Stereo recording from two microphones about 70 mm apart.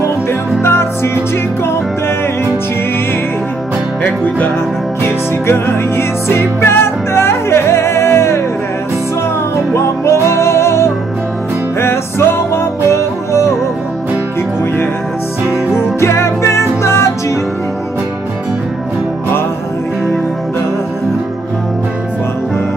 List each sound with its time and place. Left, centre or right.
0.0 s music: left
5.0 s music: left
9.8 s music: left
16.0 s music: left